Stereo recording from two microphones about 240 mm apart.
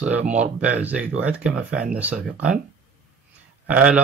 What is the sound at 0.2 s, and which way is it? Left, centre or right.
Speech, right.